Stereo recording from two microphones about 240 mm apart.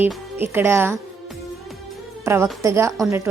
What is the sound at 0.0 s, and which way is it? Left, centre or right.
Speech, centre.